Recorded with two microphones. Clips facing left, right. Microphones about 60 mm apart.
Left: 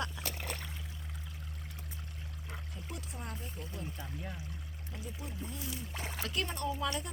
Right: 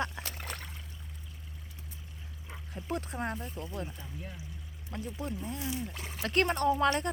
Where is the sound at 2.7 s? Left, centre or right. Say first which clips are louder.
Right 14 dB; right.